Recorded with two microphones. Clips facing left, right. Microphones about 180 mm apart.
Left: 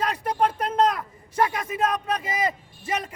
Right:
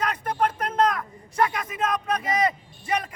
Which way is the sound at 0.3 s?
30° left (ahead or behind).